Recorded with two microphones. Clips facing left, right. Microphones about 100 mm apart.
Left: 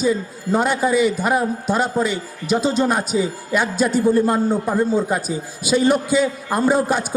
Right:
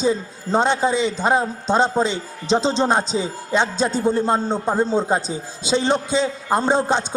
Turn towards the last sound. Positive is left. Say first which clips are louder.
# left 1 dB
turn(degrees=-25)  # may be behind; listen again after turning